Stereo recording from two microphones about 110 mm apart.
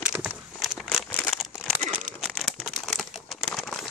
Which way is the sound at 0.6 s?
Centre (ahead or behind).